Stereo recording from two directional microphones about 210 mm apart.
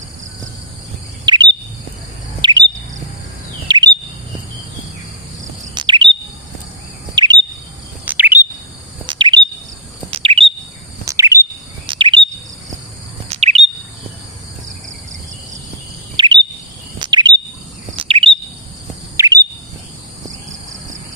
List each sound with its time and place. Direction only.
1.2 s chirp: 20° right (ahead or behind)
3.7 s chirp: 20° right (ahead or behind)
5.7 s chirp: 20° right (ahead or behind)
7.2 s bird vocalization: 20° right (ahead or behind)
8.0 s bird vocalization: 10° right (ahead or behind)
9.0 s chirp: 20° right (ahead or behind)
11.0 s bird vocalization: 15° right (ahead or behind)
13.3 s chirp: 30° right (ahead or behind)
16.1 s bird vocalization: 20° right (ahead or behind)
19.1 s chirp: 15° right (ahead or behind)